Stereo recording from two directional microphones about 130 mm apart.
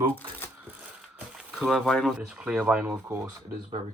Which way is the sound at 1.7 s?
Centre (ahead or behind).